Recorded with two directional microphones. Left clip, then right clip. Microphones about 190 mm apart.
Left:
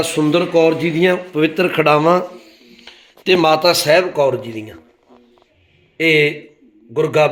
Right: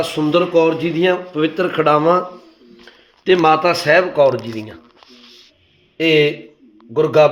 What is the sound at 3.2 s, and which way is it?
Speech, 25° left (ahead or behind).